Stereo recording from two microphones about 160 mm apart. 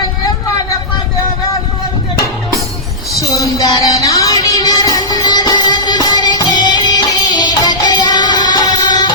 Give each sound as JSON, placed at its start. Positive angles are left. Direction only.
{"t": 3.2, "sound": "music", "side_deg": 20}